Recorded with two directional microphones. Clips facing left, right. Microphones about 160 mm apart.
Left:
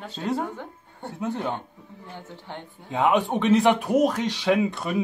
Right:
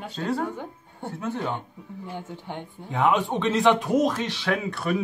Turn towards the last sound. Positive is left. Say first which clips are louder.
# left 3 dB
turn(degrees=20)  # may be behind; listen again after turning